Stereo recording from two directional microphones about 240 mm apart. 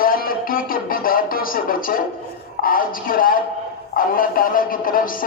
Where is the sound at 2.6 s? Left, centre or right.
Left.